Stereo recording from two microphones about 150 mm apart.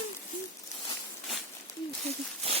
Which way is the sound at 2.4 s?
40° right (ahead or behind).